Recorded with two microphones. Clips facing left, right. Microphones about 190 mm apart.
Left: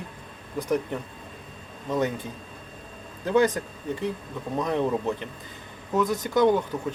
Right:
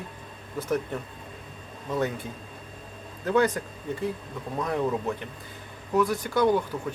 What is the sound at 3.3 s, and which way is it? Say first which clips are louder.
Speech: left 2 dB; 20° left (ahead or behind).